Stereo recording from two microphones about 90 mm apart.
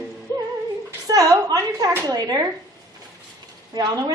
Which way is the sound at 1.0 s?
40° right (ahead or behind).